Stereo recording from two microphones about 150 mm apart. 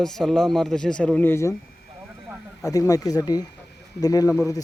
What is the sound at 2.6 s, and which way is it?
Speech, 20° left (ahead or behind).